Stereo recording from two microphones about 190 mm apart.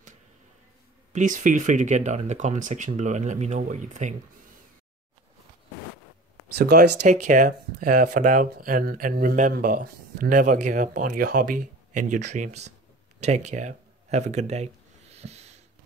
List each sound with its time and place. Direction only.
1.1 s speech: 40° right (ahead or behind)
6.5 s speech: 55° right (ahead or behind)
7.1 s speech: 45° right (ahead or behind)